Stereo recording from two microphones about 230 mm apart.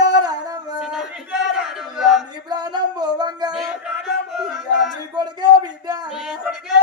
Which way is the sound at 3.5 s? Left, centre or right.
Centre.